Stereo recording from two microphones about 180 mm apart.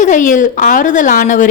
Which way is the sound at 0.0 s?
45° left (ahead or behind).